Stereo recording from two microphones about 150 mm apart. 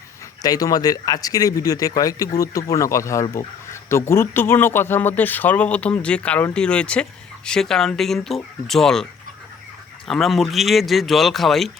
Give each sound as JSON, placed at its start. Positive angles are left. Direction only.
{"t": 0.4, "sound": "speech", "side_deg": 25}
{"t": 10.1, "sound": "speech", "side_deg": 0}